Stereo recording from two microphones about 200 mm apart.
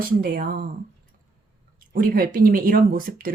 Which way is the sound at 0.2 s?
45° right (ahead or behind).